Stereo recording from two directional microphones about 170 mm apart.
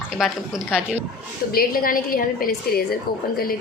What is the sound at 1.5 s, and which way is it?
Speech, 55° left (ahead or behind).